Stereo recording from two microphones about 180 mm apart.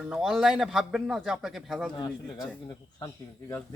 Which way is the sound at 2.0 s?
20° left (ahead or behind).